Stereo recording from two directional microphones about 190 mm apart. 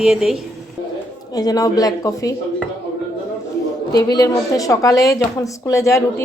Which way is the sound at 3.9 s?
20° left (ahead or behind).